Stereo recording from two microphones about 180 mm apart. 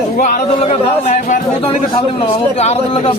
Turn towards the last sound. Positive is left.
turn(degrees=35)  # may be behind; listen again after turning